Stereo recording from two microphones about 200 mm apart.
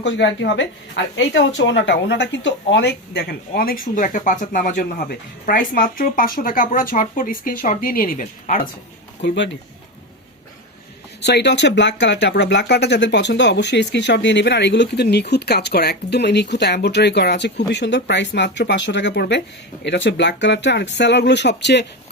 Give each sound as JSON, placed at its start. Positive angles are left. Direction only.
{"t": 0.0, "sound": "speech", "side_deg": 60}
{"t": 9.2, "sound": "speech", "side_deg": 60}
{"t": 11.2, "sound": "speech", "side_deg": 60}